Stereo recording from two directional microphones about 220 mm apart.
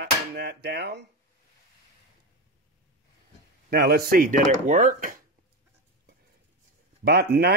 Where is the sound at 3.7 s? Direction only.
45° right (ahead or behind).